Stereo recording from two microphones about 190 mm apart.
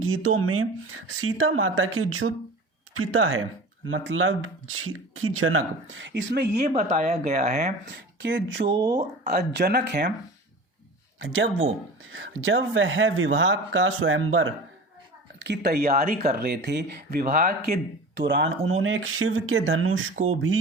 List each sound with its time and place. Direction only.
0.0 s speech: 90° right; by 6.7 s 60° right (ahead or behind)
6.7 s speech: 35° right (ahead or behind)
7.9 s speech: 70° right (ahead or behind)
8.7 s speech: 20° right (ahead or behind)
9.2 s speech: 55° right (ahead or behind)
11.2 s speech: 90° right
15.4 s speech: 60° right (ahead or behind); by 20.1 s 90° right